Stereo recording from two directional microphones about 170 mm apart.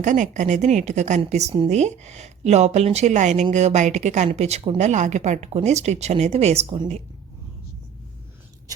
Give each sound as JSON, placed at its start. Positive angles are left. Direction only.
{"t": 0.0, "sound": "a woman's voice", "side_deg": -45}